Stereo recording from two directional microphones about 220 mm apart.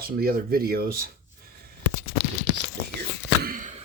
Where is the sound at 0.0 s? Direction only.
45° right (ahead or behind).